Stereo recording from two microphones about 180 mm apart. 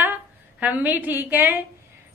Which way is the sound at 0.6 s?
10° right (ahead or behind).